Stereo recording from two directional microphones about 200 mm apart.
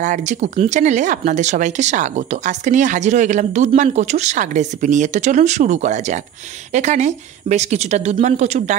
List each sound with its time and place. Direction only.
0.0 s speech: 35° right (ahead or behind)